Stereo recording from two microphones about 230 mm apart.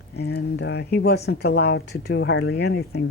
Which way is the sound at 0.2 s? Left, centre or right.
Left.